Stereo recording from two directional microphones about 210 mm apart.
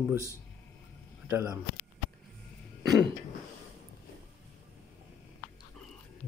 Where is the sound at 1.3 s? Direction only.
15° right (ahead or behind).